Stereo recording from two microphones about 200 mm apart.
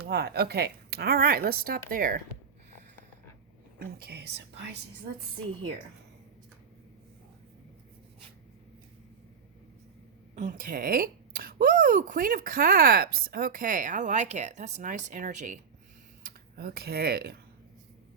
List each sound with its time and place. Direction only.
0.1 s speech: 55° right (ahead or behind)
3.8 s speech: 50° right (ahead or behind)
10.3 s speech: 40° right (ahead or behind)
16.2 s speech: 50° right (ahead or behind)